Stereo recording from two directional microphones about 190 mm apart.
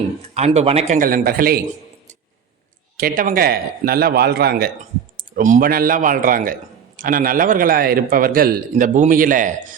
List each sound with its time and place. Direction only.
0.3 s a man's voice: 35° right (ahead or behind); by 1.6 s 50° right (ahead or behind)
3.0 s a man's voice: 50° right (ahead or behind)
5.4 s a man's voice: 45° right (ahead or behind)